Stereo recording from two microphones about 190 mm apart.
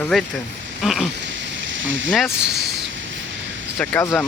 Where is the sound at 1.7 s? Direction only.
80° right.